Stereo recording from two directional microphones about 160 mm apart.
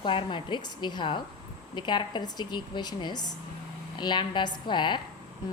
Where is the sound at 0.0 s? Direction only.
30° left (ahead or behind).